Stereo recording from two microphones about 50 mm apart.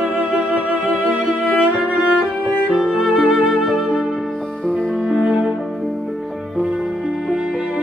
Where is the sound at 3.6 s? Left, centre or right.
Centre.